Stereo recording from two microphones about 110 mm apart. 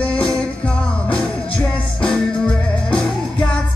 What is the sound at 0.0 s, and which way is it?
Music, 10° left (ahead or behind).